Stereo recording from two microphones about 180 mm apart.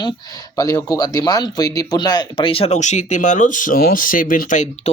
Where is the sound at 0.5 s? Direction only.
20° left (ahead or behind).